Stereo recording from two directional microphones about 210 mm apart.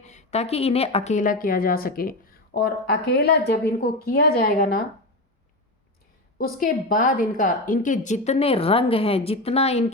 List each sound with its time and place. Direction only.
0.0 s a woman's voice: 35° left (ahead or behind)
6.4 s a woman's voice: 45° left (ahead or behind)